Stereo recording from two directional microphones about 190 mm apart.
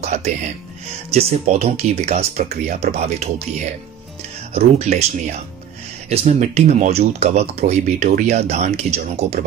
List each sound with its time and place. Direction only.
0.0 s music: 35° right (ahead or behind)
1.1 s speech: 35° right (ahead or behind)
4.6 s speech: 35° right (ahead or behind)
6.0 s speech: 35° right (ahead or behind)